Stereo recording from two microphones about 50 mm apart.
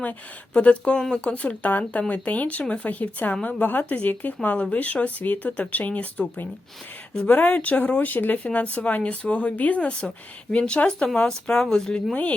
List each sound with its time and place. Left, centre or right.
0.0 s speech: left
7.3 s speech: left
8.7 s speech: left